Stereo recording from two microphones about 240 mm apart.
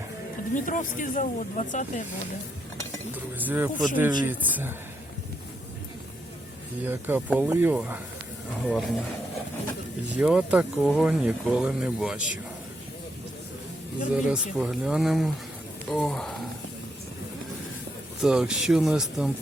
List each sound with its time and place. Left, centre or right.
0.5 s speech: left
3.3 s speech: centre
6.8 s speech: centre
10.2 s speech: centre
14.3 s speech: centre
18.2 s speech: centre